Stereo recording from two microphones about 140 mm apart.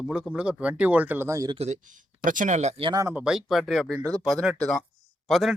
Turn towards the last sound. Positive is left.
turn(degrees=0)  # may be behind; listen again after turning